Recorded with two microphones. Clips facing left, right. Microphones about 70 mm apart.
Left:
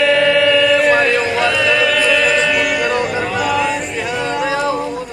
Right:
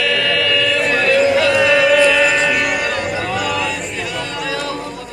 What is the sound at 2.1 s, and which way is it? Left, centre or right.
Music, centre.